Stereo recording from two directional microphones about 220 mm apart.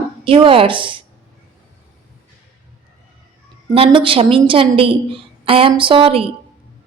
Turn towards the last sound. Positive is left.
turn(degrees=-25)  # may be behind; listen again after turning